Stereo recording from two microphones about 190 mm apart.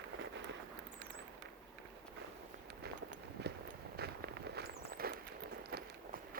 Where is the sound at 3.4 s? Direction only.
60° right (ahead or behind).